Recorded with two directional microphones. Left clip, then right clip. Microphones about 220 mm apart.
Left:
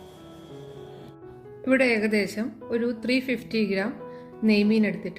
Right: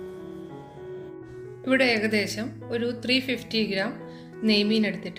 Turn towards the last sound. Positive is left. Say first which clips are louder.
# left 1 dB
turn(degrees=35)  # may be behind; listen again after turning